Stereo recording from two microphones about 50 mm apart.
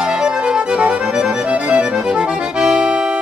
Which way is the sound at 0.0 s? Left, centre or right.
Centre.